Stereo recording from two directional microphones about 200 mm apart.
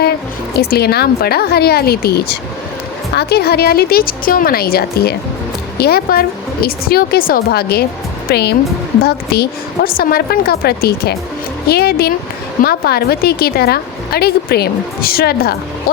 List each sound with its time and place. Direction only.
0.5 s a woman's voice: 50° left (ahead or behind)